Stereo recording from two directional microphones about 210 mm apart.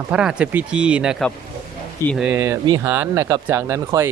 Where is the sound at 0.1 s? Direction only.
5° right (ahead or behind).